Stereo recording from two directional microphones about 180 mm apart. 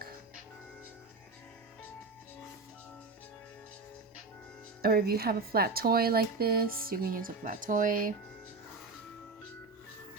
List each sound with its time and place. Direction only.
4.8 s speech: 55° right (ahead or behind)